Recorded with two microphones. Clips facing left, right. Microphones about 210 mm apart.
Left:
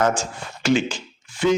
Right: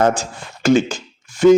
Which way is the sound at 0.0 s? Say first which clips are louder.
Right 4 dB; 35° right (ahead or behind).